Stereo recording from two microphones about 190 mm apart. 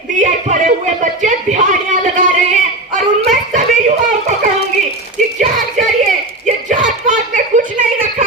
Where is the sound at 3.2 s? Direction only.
40° right (ahead or behind).